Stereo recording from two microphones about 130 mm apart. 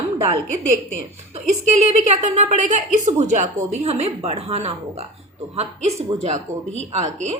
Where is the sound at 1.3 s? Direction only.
60° right (ahead or behind).